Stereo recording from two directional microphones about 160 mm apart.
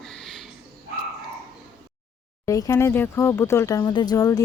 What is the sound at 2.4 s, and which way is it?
Speech, 20° left (ahead or behind).